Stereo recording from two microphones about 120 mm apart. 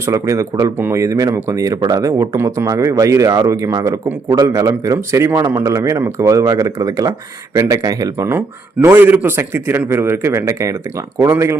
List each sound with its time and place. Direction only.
0.0 s speech: 25° right (ahead or behind)